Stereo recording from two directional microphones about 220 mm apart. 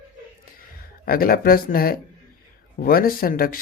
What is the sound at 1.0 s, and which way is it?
Speech, 40° left (ahead or behind).